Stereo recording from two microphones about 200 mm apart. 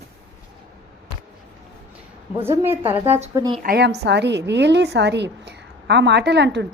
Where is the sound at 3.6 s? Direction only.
50° right (ahead or behind).